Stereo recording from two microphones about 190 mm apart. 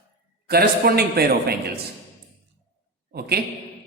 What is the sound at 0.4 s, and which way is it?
A man's voice, 55° right (ahead or behind).